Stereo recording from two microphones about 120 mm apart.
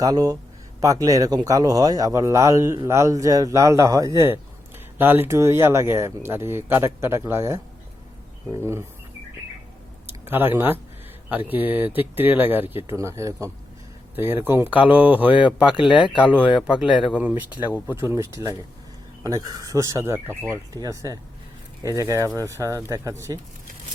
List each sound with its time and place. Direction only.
0.0 s speech: 30° right (ahead or behind)
10.2 s speech: 15° right (ahead or behind)
15.8 s speech: 45° left (ahead or behind)
16.0 s speech: 10° right (ahead or behind)